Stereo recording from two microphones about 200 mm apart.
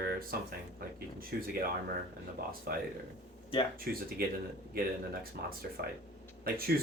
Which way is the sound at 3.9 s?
50° right (ahead or behind).